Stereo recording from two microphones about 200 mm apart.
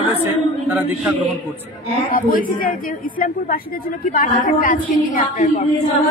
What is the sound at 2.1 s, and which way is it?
A woman's voice, 45° left (ahead or behind).